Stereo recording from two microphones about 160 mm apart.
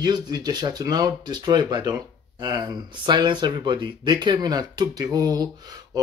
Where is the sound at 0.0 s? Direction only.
25° right (ahead or behind).